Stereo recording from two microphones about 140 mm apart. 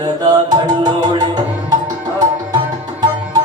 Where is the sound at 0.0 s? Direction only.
30° right (ahead or behind).